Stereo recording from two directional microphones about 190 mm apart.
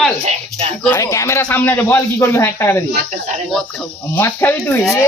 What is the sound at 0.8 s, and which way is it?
A man's voice, 15° left (ahead or behind).